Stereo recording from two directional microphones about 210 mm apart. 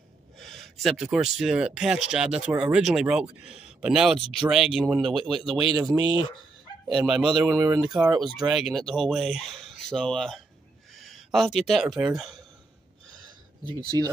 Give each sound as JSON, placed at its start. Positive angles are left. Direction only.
{"t": 0.4, "sound": "speech", "side_deg": 0}
{"t": 7.1, "sound": "speech", "side_deg": 0}
{"t": 7.5, "sound": "speech", "side_deg": -15}
{"t": 7.8, "sound": "speech", "side_deg": 0}
{"t": 13.1, "sound": "a sound", "side_deg": -20}